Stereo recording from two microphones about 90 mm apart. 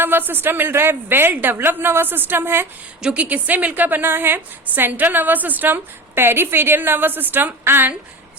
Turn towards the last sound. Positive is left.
turn(degrees=-25)  # may be behind; listen again after turning